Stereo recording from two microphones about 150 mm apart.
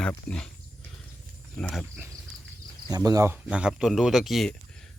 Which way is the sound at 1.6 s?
5° left (ahead or behind).